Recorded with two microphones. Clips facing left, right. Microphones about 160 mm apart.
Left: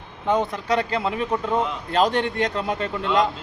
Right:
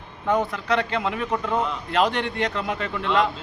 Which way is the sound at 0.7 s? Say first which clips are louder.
Left 1 dB; 35° left (ahead or behind).